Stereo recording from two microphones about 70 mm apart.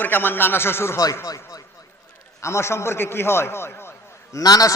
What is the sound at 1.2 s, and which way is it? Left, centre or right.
Speech, left.